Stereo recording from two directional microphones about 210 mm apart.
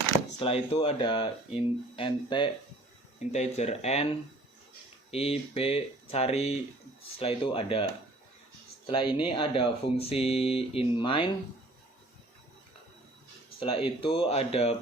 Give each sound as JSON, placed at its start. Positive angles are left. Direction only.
{"t": 0.3, "sound": "speech", "side_deg": 30}
{"t": 8.9, "sound": "speech", "side_deg": 25}
{"t": 13.6, "sound": "speech", "side_deg": 25}